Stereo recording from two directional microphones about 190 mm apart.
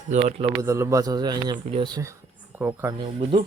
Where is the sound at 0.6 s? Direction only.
15° right (ahead or behind).